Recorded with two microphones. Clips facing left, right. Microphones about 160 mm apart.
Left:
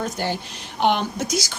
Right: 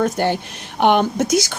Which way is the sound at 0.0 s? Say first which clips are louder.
Right 7 dB; 60° right (ahead or behind).